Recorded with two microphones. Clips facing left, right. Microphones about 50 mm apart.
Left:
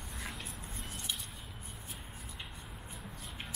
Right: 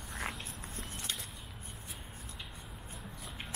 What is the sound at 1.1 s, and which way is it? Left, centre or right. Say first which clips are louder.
Vehicle: left 1 dB; right.